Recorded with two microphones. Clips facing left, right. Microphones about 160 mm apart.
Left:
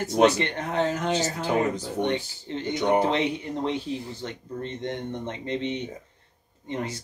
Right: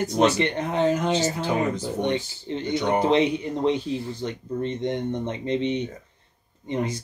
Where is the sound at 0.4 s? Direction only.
20° right (ahead or behind).